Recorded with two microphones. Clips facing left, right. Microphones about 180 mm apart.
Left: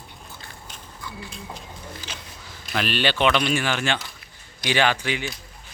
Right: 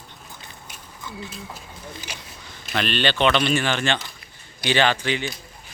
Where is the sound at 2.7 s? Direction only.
5° left (ahead or behind).